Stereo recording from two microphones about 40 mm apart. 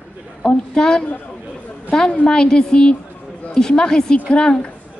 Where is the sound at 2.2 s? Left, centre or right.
Centre.